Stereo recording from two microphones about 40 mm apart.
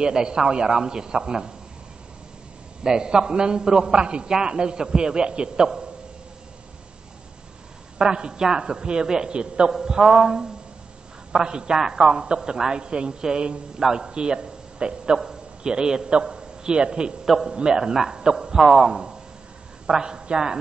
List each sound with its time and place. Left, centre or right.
0.0 s a woman's voice: centre
2.8 s a woman's voice: centre
8.0 s a woman's voice: right
9.8 s a man's voice: centre
17.7 s a man's voice: centre